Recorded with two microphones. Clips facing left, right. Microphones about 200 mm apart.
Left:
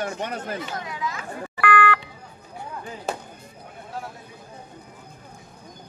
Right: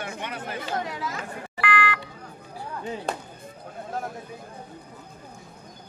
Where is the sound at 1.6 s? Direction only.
55° left (ahead or behind).